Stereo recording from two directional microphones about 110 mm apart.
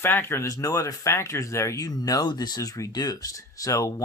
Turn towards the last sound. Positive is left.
turn(degrees=30)  # may be behind; listen again after turning